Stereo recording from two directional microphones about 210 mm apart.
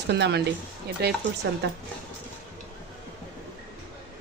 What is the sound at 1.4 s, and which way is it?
Speech, 55° right (ahead or behind).